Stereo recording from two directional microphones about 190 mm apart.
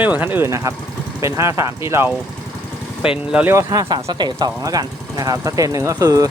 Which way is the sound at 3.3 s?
10° right (ahead or behind).